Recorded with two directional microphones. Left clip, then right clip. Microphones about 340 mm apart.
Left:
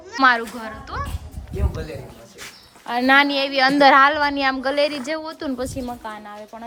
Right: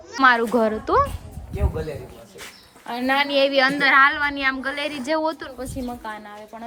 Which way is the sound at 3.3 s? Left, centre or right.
Centre.